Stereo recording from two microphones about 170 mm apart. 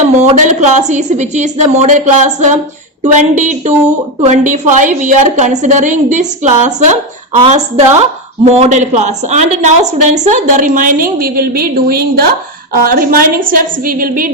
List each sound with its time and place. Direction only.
0.0 s a woman's voice: 40° right (ahead or behind)